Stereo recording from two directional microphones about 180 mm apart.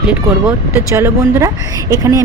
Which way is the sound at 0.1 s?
10° right (ahead or behind).